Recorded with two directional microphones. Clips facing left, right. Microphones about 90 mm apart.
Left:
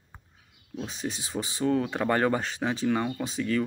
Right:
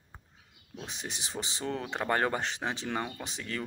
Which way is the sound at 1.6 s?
35° left (ahead or behind).